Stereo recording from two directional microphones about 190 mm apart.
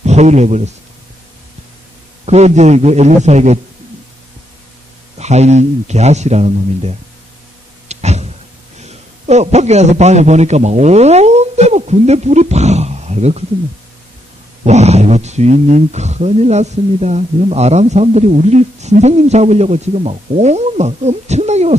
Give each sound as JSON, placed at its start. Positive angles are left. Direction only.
{"t": 0.0, "sound": "speech", "side_deg": -35}
{"t": 2.2, "sound": "speech", "side_deg": -35}
{"t": 5.1, "sound": "speech", "side_deg": -35}
{"t": 7.9, "sound": "a sound", "side_deg": -35}
{"t": 8.8, "sound": "a man's voice", "side_deg": -35}
{"t": 14.6, "sound": "speech", "side_deg": -35}